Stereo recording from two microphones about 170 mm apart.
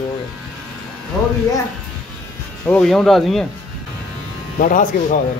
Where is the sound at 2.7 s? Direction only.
5° left (ahead or behind).